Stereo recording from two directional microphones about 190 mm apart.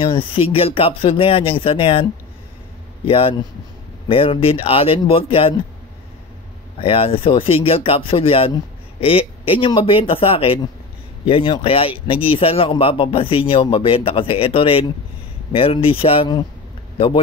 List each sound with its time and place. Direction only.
0.0 s speech: 25° left (ahead or behind)
3.1 s speech: 30° left (ahead or behind)
6.8 s speech: 30° left (ahead or behind)